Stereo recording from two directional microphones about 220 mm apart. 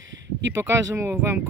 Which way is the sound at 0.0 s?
55° right (ahead or behind).